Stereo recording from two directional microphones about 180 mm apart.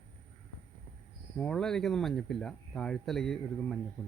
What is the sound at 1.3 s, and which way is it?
Speech, 5° left (ahead or behind).